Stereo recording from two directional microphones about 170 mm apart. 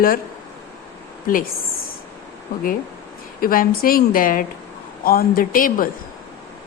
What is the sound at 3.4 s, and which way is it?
Speech, 55° left (ahead or behind).